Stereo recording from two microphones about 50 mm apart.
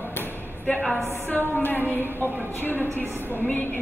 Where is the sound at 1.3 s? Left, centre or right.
Left.